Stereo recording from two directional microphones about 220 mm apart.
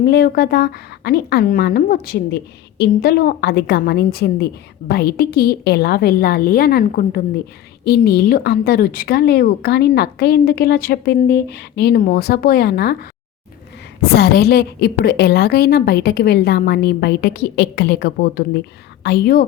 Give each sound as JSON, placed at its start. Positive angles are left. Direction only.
{"t": 0.1, "sound": "a woman's voice", "side_deg": 45}